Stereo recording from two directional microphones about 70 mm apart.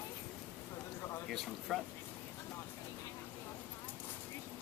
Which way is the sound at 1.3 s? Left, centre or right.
Centre.